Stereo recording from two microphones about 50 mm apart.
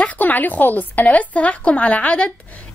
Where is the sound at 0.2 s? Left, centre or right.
Left.